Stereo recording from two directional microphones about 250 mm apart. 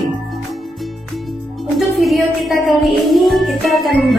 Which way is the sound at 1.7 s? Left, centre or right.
Centre.